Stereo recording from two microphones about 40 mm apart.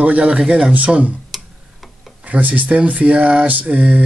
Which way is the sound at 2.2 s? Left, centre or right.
Right.